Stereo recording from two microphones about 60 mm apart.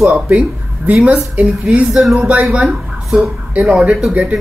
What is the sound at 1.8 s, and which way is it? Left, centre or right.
Speech, centre.